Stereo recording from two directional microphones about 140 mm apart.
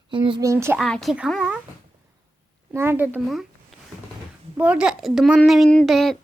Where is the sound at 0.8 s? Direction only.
Centre (ahead or behind).